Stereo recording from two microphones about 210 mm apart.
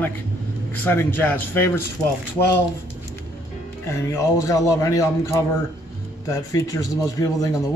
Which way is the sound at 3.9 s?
15° left (ahead or behind).